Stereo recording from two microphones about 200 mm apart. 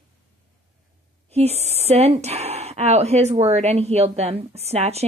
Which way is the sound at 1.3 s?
30° right (ahead or behind).